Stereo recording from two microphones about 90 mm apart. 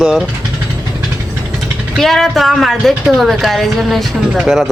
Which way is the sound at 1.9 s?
5° left (ahead or behind).